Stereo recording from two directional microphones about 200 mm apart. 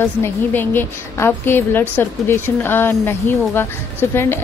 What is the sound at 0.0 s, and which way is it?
A woman's voice, 10° left (ahead or behind).